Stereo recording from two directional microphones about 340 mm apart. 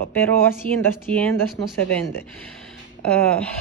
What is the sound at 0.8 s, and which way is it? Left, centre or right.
Speech, centre.